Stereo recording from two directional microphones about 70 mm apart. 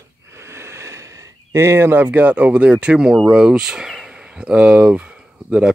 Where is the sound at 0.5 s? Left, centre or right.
Right.